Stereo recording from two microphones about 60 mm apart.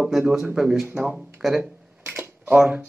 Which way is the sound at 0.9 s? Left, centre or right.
Right.